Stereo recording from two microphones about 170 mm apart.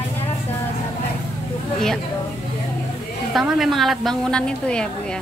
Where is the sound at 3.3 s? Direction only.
5° right (ahead or behind).